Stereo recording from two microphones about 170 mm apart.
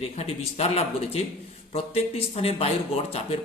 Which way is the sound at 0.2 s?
40° left (ahead or behind).